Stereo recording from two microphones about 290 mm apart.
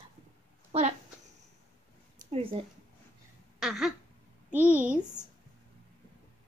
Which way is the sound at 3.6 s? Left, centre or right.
Centre.